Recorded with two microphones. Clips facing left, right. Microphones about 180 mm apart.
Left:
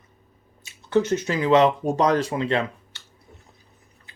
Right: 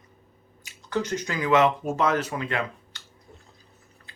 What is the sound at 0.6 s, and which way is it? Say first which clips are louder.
Speech: left 7 dB; 20° left (ahead or behind).